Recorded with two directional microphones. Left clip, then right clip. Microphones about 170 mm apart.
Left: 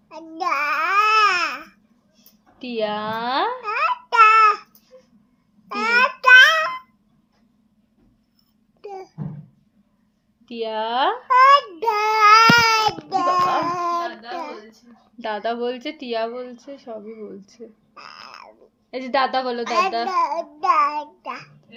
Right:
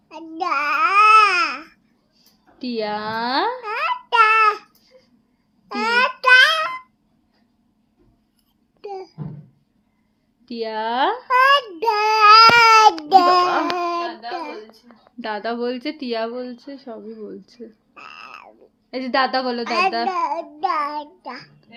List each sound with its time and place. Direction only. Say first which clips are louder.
0.1 s babbling: right 1 dB; 25° right (ahead or behind)
2.6 s a sound: even; 30° right (ahead or behind)
5.6 s child singing: even; 30° right (ahead or behind)
8.8 s babbling: right 3 dB; 30° right (ahead or behind)
10.4 s child singing: even; 30° right (ahead or behind)
12.6 s child singing: right 7 dB; 65° right (ahead or behind)
13.4 s a sound: right 1 dB; 35° right (ahead or behind)
15.2 s speech: even; 25° right (ahead or behind)
17.9 s a woman's voice: right 2 dB; 20° right (ahead or behind)